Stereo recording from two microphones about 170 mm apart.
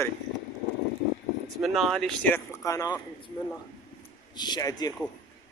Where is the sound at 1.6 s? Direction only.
Centre (ahead or behind); by 3.3 s 25° left (ahead or behind).